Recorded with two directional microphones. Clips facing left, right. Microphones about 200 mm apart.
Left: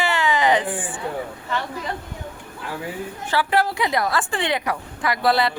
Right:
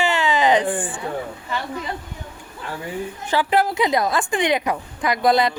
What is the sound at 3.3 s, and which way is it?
A woman's voice, 20° right (ahead or behind).